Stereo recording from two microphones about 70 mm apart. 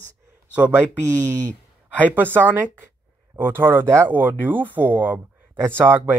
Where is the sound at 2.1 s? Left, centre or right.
Right.